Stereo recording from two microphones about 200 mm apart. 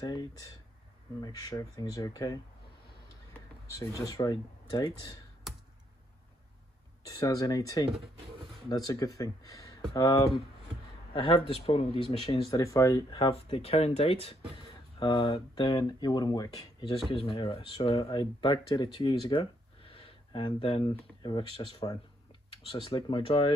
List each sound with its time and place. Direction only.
0.0 s speech: 20° left (ahead or behind)
3.7 s speech: 15° left (ahead or behind)
5.5 s computer keyboard: centre (ahead or behind)
7.1 s speech: 15° left (ahead or behind)
11.1 s speech: 30° left (ahead or behind)
22.7 s speech: 25° left (ahead or behind)